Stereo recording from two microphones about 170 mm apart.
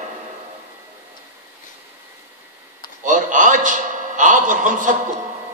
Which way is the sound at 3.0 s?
50° right (ahead or behind).